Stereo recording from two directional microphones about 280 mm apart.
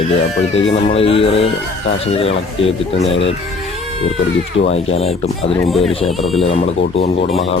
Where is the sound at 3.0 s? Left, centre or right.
Left.